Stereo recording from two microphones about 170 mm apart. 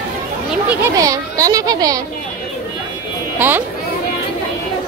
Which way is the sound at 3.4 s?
10° right (ahead or behind).